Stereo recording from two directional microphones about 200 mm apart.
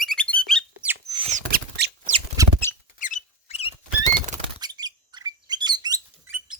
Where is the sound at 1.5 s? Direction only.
55° right (ahead or behind).